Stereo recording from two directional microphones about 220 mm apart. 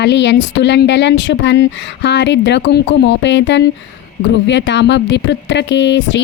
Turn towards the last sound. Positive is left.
turn(degrees=55)  # may be behind; listen again after turning